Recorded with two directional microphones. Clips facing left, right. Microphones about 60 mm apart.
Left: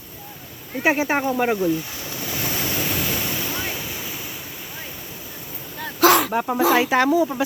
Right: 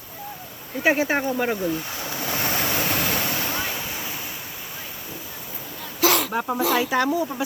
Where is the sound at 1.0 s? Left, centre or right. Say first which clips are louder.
Left 2 dB; left.